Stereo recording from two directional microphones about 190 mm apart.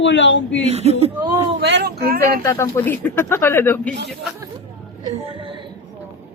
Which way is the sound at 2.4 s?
15° left (ahead or behind).